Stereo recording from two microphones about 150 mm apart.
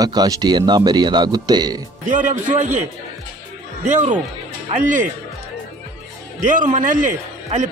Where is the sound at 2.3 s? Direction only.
55° right (ahead or behind).